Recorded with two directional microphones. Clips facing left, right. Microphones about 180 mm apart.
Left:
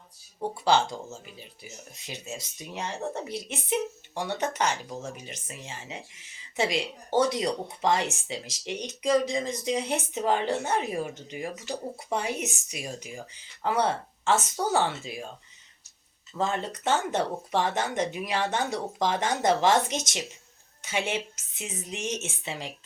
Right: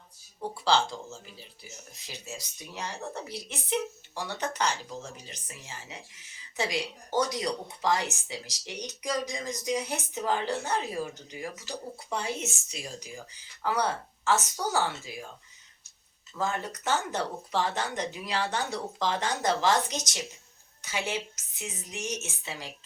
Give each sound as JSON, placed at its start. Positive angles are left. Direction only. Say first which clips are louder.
{"t": 0.3, "sound": "speech", "louder": "left 2 dB", "side_deg": 20}
{"t": 16.4, "sound": "speech", "louder": "left 3 dB", "side_deg": 25}